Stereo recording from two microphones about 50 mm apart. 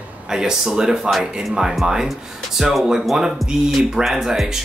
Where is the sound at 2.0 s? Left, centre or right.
Centre.